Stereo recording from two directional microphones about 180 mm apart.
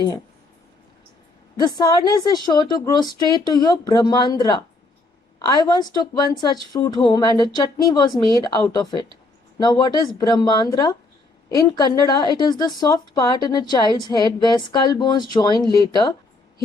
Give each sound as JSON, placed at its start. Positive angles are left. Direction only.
{"t": 1.5, "sound": "a woman's voice", "side_deg": 20}